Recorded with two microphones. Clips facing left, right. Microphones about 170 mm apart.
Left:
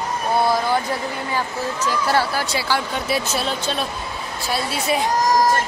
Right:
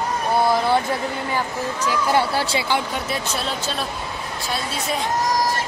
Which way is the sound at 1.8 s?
20° right (ahead or behind).